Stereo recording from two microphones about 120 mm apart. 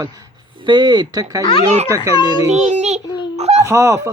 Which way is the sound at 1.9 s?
25° right (ahead or behind).